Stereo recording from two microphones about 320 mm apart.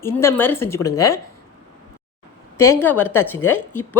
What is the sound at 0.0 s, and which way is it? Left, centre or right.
Speech, centre.